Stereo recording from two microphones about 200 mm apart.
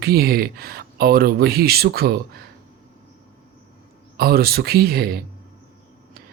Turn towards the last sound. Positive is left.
turn(degrees=-50)  # may be behind; listen again after turning